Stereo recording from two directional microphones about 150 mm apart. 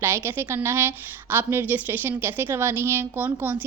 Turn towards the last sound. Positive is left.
turn(degrees=-15)  # may be behind; listen again after turning